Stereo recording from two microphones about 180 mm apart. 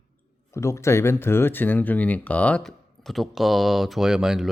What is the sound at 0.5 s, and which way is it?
Speech, 15° left (ahead or behind).